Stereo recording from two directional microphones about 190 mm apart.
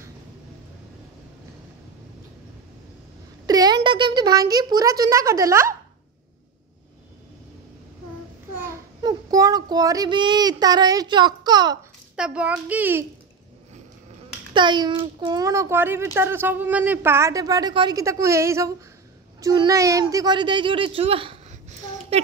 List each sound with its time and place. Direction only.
3.4 s a child's voice: 20° right (ahead or behind)
8.5 s child singing: 15° right (ahead or behind)
12.2 s speech: 5° right (ahead or behind)
14.5 s a child's voice: 25° right (ahead or behind)